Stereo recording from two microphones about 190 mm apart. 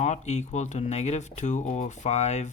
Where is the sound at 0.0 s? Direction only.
35° left (ahead or behind).